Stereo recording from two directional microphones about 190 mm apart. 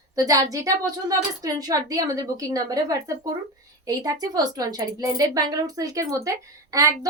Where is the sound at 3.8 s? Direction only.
20° right (ahead or behind).